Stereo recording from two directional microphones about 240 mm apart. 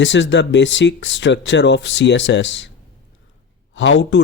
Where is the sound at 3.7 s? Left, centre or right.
Left.